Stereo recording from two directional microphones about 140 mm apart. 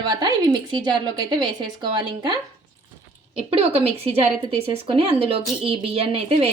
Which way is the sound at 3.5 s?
45° right (ahead or behind).